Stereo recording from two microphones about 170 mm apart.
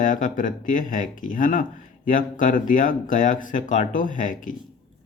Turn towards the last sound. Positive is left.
turn(degrees=50)  # may be behind; listen again after turning